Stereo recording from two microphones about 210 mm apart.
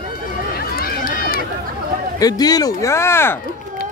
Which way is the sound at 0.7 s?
45° left (ahead or behind).